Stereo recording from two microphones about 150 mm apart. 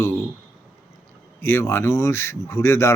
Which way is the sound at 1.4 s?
15° left (ahead or behind).